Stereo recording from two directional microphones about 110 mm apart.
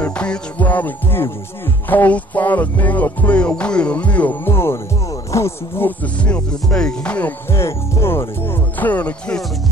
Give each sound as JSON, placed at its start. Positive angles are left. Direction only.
{"t": 0.0, "sound": "music", "side_deg": 10}
{"t": 7.5, "sound": "speech", "side_deg": 25}